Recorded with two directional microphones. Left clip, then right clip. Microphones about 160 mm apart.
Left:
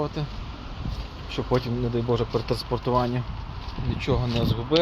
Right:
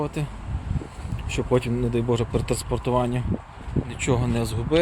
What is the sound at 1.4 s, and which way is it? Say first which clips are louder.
Speech: right 2 dB; 35° right (ahead or behind).